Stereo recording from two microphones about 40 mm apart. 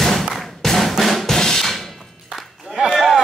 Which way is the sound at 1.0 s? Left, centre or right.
Centre.